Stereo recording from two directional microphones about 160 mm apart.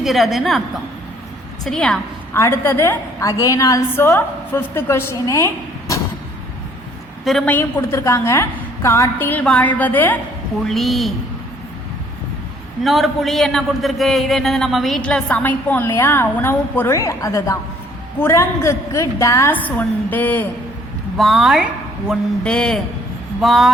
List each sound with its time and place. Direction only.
0.0 s a man's voice: centre (ahead or behind)
1.6 s a man's voice: 5° left (ahead or behind)
2.3 s a woman's voice: 15° left (ahead or behind)
7.3 s a woman's voice: 5° left (ahead or behind)
10.7 s a man's voice: centre (ahead or behind)
12.8 s a man's voice: centre (ahead or behind)
21.2 s a woman's voice: centre (ahead or behind)